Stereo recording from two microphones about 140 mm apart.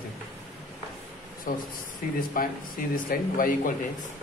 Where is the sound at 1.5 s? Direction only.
80° left.